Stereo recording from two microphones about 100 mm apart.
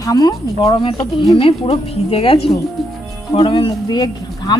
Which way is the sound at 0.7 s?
60° left (ahead or behind).